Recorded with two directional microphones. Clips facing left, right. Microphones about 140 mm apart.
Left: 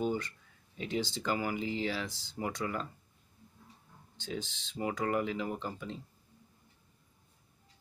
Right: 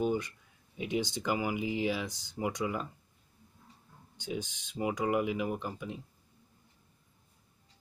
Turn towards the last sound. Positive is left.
turn(degrees=-10)  # may be behind; listen again after turning